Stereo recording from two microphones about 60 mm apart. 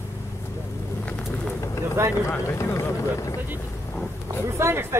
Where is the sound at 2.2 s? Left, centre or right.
Left.